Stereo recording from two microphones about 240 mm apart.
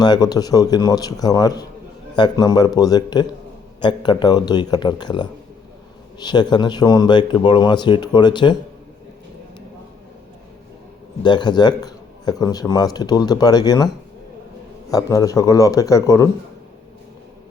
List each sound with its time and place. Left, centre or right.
0.0 s a man's voice: centre
11.2 s a man's voice: centre